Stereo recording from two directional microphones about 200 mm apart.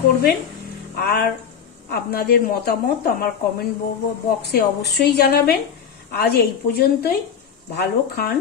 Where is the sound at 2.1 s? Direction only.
50° left (ahead or behind).